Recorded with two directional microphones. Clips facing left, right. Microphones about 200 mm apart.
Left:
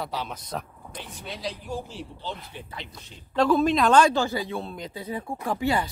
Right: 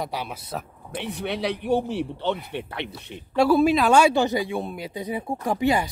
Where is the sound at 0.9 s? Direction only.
65° right (ahead or behind).